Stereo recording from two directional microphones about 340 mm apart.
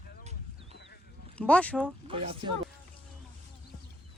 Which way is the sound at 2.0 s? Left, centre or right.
Centre.